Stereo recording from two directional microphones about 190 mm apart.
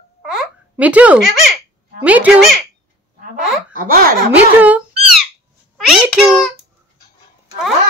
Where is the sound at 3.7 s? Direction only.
45° right (ahead or behind).